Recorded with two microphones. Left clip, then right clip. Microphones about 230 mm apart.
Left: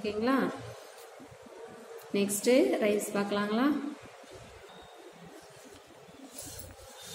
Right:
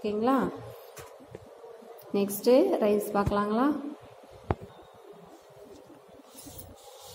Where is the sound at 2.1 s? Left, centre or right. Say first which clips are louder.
Right 3 dB; centre.